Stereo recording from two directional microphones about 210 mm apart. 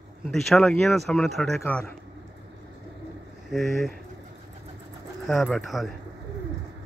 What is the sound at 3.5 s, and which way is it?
Speech, centre (ahead or behind).